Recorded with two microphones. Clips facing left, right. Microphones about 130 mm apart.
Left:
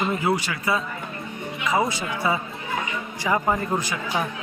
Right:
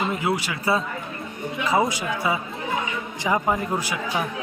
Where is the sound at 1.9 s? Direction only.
10° right (ahead or behind).